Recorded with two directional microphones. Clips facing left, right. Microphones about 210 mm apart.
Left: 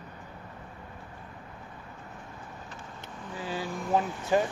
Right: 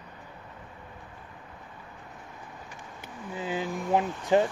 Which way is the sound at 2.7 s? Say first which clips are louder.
Even; 15° right (ahead or behind).